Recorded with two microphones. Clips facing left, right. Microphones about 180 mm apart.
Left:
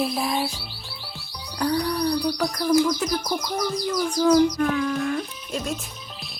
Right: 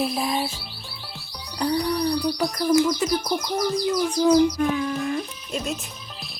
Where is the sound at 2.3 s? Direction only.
5° right (ahead or behind).